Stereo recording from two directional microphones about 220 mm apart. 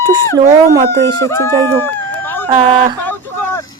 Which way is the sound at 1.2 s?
10° left (ahead or behind).